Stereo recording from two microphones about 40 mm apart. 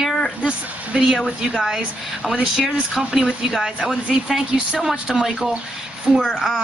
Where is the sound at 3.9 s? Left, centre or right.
Right.